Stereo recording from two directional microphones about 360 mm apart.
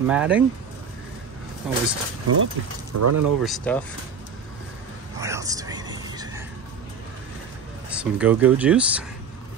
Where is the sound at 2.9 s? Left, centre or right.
Right.